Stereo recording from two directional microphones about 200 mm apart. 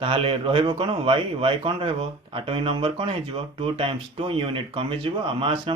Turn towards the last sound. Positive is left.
turn(degrees=-25)  # may be behind; listen again after turning